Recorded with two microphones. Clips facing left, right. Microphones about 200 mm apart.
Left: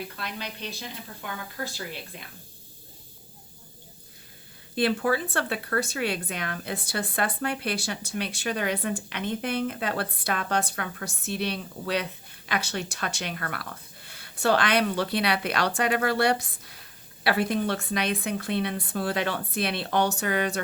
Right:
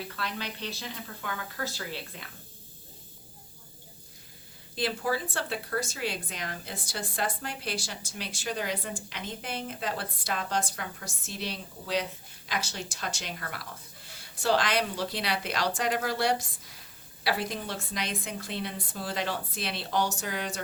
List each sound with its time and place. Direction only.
0.2 s speech: 15° left (ahead or behind)
4.7 s speech: 60° left (ahead or behind)